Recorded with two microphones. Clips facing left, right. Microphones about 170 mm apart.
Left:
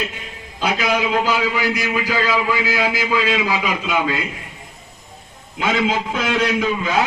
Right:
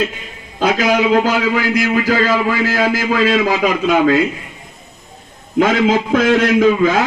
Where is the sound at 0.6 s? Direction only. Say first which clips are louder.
Right 6 dB; 45° right (ahead or behind).